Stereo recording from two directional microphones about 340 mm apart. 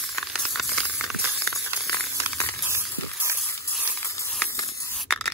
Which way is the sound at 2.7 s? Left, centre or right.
Centre.